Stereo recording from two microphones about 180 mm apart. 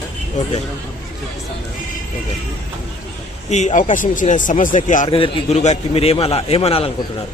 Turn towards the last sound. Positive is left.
turn(degrees=35)  # may be behind; listen again after turning